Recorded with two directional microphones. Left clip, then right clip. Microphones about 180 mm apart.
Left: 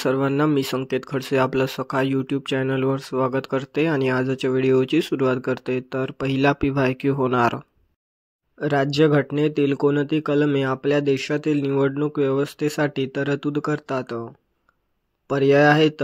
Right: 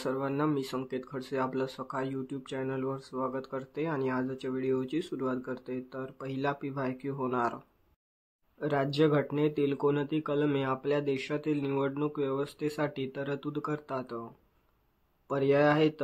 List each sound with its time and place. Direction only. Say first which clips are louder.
0.0 s speech: left 11 dB; 50° left (ahead or behind)
15.2 s speech: left 10 dB; 40° left (ahead or behind)